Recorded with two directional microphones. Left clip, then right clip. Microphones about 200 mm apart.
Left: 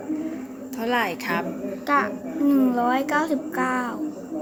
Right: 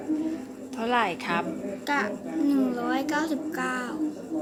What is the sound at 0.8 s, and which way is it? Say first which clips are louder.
Speech: left 1 dB; 10° right (ahead or behind).